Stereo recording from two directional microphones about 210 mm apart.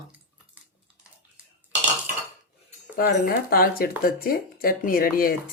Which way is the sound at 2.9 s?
45° left (ahead or behind).